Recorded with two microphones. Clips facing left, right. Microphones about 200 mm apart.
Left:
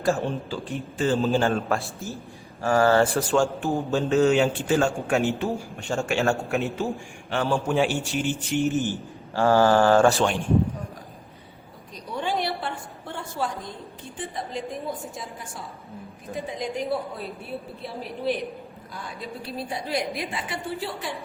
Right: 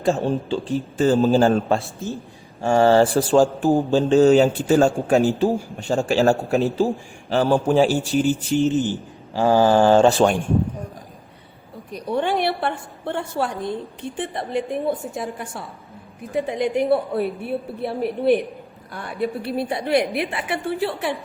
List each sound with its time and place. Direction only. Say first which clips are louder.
0.2 s a man's voice: right 6 dB; 30° right (ahead or behind)
8.8 s speech: right 4 dB; 15° right (ahead or behind)
11.9 s a woman's voice: right 7 dB; 60° right (ahead or behind)